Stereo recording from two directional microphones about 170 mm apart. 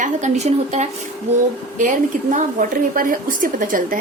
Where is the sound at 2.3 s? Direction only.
55° right (ahead or behind).